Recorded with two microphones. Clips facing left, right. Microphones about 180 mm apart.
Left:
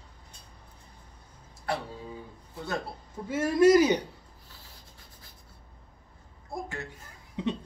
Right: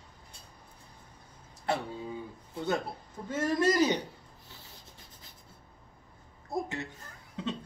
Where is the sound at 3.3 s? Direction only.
10° left (ahead or behind).